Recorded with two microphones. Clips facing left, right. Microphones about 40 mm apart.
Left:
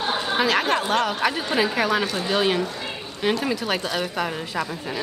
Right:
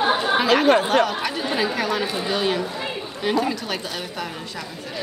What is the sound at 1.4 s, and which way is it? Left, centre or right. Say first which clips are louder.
A woman's voice: left 1 dB; centre.